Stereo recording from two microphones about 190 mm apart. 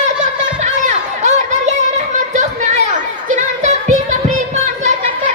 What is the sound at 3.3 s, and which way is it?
Music, 40° right (ahead or behind).